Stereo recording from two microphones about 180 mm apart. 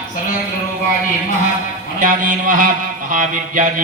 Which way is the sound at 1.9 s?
50° right (ahead or behind).